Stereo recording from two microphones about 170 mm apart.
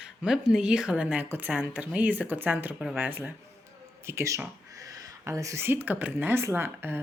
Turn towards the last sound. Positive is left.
turn(degrees=-10)  # may be behind; listen again after turning